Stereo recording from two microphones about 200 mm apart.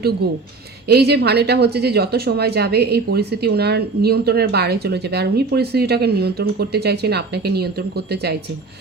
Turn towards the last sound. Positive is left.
turn(degrees=-55)  # may be behind; listen again after turning